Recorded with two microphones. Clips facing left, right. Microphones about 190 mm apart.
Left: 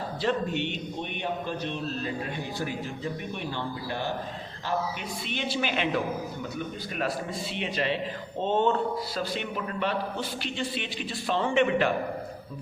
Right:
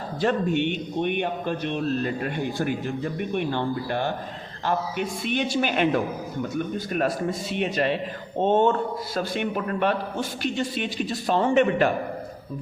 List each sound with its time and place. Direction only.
0.2 s speech: 50° right (ahead or behind)
5.2 s a man's voice: 50° right (ahead or behind)